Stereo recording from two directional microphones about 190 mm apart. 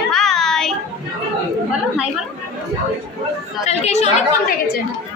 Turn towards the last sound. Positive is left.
turn(degrees=35)  # may be behind; listen again after turning